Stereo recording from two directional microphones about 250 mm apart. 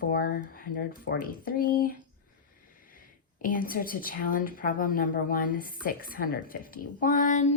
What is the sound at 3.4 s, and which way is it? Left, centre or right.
A woman's voice, left.